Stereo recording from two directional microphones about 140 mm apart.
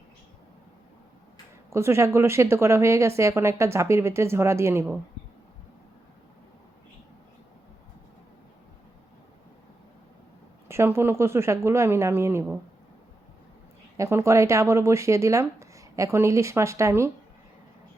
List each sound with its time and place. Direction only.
1.7 s speech: 20° right (ahead or behind)
10.7 s speech: 20° right (ahead or behind)
13.9 s speech: 20° right (ahead or behind)